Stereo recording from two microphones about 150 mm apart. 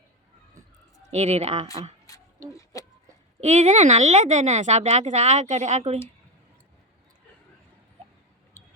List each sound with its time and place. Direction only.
1.1 s speech: 45° right (ahead or behind)
3.4 s speech: 50° right (ahead or behind)